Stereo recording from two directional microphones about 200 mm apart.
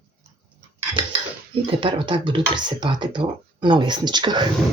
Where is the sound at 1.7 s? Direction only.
25° right (ahead or behind).